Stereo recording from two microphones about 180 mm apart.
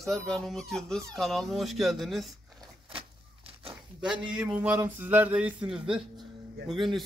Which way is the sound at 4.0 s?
5° right (ahead or behind).